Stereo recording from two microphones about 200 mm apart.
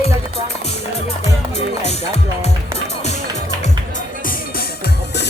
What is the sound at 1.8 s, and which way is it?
Speech, 35° left (ahead or behind).